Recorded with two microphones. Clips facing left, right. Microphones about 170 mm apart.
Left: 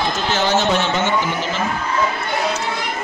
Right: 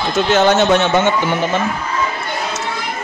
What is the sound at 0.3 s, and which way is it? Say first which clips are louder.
Speech: right 6 dB; 60° right (ahead or behind).